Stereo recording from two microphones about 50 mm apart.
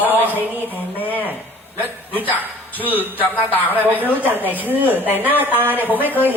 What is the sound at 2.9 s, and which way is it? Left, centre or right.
Speech, right.